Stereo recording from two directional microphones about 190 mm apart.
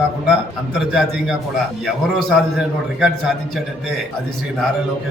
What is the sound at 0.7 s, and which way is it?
A man's voice, centre (ahead or behind).